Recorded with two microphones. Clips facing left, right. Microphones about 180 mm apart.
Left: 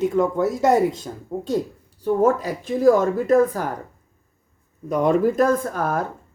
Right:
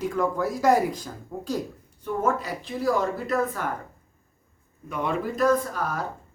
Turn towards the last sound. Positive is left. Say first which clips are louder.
# left 3 dB
turn(degrees=50)  # may be behind; listen again after turning